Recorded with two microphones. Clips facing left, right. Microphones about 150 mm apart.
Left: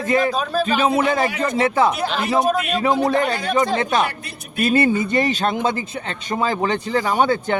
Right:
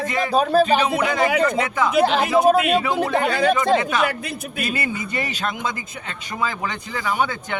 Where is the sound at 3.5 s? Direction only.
35° left (ahead or behind).